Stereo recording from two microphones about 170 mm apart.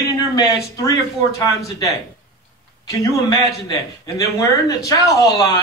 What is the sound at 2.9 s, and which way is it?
A man's voice, 20° left (ahead or behind).